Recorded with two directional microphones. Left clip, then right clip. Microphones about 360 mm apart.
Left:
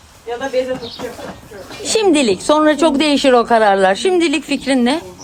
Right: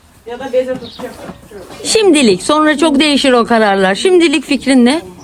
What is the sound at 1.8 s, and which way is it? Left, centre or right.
Speech, centre.